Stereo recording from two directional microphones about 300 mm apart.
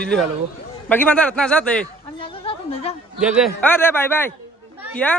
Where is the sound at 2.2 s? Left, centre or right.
Centre.